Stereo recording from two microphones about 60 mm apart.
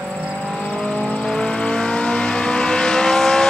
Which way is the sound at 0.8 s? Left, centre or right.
Centre.